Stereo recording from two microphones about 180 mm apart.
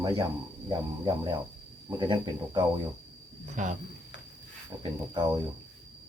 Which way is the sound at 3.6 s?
45° right (ahead or behind).